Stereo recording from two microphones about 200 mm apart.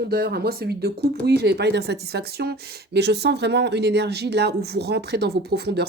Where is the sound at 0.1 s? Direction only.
50° right (ahead or behind).